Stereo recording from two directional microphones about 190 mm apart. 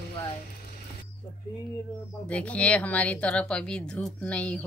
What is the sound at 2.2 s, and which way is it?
Speech, 5° left (ahead or behind).